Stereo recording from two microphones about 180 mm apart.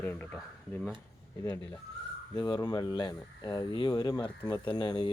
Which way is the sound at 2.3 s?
25° left (ahead or behind).